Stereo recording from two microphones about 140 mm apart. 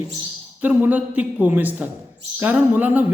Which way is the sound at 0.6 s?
10° right (ahead or behind).